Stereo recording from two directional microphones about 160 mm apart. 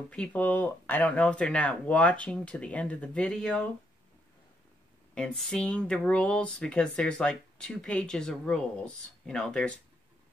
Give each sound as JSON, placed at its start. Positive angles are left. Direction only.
{"t": 0.1, "sound": "speech", "side_deg": 10}
{"t": 5.1, "sound": "speech", "side_deg": 5}